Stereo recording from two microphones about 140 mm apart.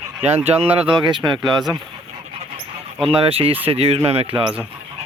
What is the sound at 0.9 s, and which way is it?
Speech, 35° right (ahead or behind).